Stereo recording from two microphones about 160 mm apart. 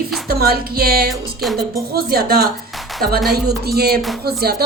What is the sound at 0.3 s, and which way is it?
A woman's voice, 70° right (ahead or behind).